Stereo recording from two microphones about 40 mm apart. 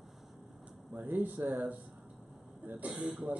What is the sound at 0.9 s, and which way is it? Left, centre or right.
Speech, right.